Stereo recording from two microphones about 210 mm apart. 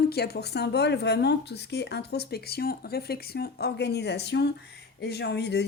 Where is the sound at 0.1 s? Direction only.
50° left (ahead or behind).